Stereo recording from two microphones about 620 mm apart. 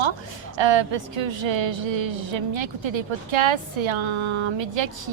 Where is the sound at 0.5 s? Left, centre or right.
Right.